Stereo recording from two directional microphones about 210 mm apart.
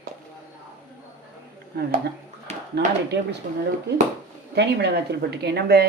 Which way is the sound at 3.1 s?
55° right (ahead or behind).